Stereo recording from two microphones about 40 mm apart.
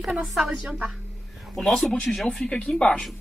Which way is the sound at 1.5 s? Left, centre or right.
Centre.